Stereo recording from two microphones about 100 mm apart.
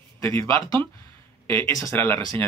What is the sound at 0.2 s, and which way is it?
Speech, 25° left (ahead or behind).